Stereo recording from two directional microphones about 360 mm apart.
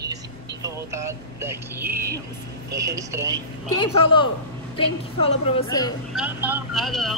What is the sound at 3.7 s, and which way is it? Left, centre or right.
A woman's voice, centre.